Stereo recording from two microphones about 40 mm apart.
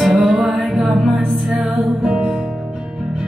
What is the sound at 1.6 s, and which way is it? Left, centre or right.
Music, centre.